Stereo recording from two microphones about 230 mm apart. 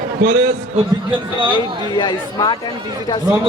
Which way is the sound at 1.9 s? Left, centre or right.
Left.